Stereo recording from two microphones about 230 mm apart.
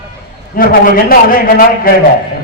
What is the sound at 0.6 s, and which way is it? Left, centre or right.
A man's voice, left.